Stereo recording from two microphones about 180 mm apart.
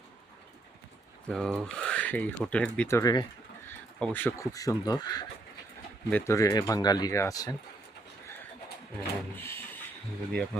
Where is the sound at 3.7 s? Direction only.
10° left (ahead or behind).